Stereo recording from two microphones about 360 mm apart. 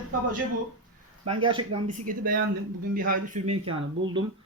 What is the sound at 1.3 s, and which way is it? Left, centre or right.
Speech, centre.